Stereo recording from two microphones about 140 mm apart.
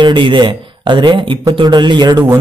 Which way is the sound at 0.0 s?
35° right (ahead or behind).